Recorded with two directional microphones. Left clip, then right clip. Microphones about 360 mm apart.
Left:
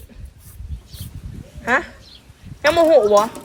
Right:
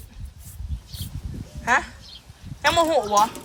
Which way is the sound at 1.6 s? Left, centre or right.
Centre.